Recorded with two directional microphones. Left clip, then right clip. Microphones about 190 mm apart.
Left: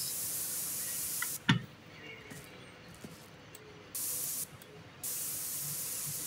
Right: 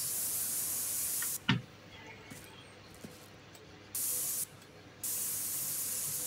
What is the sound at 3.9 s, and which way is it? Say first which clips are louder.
Spray: right 2 dB; centre (ahead or behind).